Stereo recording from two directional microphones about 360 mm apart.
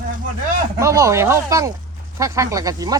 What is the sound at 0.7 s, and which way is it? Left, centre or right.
Speech, centre.